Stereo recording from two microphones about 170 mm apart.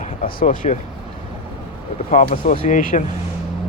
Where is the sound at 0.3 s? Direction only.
50° left (ahead or behind).